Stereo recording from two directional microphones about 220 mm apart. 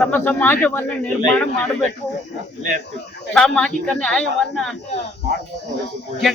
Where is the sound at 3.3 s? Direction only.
5° left (ahead or behind).